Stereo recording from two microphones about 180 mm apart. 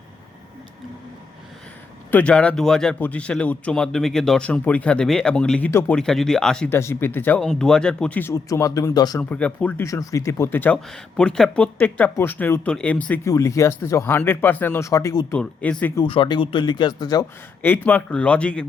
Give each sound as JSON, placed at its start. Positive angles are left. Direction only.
{"t": 2.0, "sound": "speech", "side_deg": 10}
{"t": 9.3, "sound": "speech", "side_deg": 5}
{"t": 13.2, "sound": "speech", "side_deg": 20}
{"t": 15.3, "sound": "speech", "side_deg": 5}
{"t": 16.0, "sound": "speech", "side_deg": 30}
{"t": 17.6, "sound": "speech", "side_deg": 10}